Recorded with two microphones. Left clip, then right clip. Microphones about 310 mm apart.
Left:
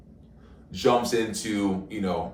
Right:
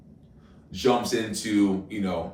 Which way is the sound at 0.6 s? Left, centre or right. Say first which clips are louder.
Left 1 dB; centre.